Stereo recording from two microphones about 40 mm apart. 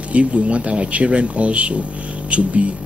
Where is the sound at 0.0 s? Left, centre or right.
Right.